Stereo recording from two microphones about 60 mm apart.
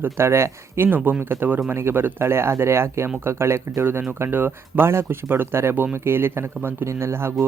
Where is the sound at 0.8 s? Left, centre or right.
Right.